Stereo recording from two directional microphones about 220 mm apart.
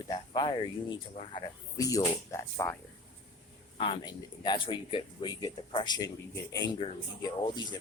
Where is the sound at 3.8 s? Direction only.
20° left (ahead or behind).